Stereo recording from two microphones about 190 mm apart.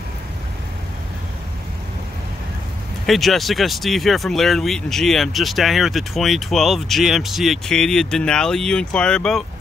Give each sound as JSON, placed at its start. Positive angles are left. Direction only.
{"t": 3.1, "sound": "speech", "side_deg": 0}